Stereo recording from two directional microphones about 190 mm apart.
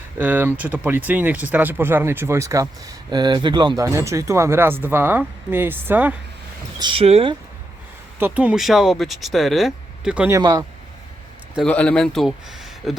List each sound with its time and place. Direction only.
0.2 s speech: 10° right (ahead or behind)
6.7 s speech: 25° right (ahead or behind)
8.2 s speech: 5° right (ahead or behind)
11.5 s speech: 5° left (ahead or behind)